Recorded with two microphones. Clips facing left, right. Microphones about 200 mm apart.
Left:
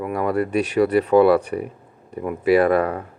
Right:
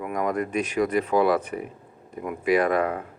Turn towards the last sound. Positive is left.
turn(degrees=35)  # may be behind; listen again after turning